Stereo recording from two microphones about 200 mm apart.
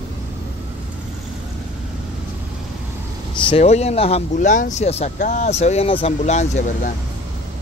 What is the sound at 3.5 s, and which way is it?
Speech, 35° left (ahead or behind).